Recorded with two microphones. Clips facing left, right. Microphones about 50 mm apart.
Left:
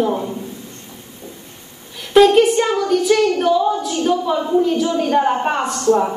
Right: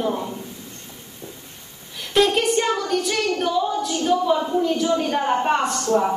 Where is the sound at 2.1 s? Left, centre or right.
Centre.